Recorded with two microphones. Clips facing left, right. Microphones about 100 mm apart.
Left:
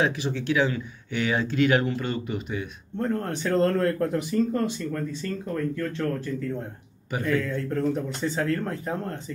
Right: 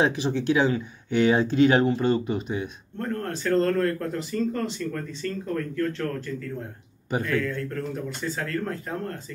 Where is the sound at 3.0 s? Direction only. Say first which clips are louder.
Left 2 dB; 15° left (ahead or behind).